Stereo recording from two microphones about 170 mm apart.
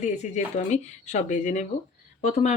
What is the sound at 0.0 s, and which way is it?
Speech, 45° left (ahead or behind).